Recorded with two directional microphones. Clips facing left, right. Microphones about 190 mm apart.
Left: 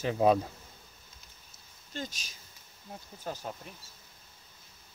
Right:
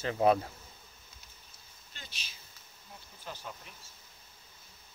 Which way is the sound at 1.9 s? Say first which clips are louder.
Left 13 dB; 45° left (ahead or behind).